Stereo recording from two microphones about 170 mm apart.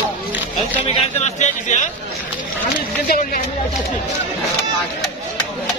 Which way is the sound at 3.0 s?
60° left (ahead or behind).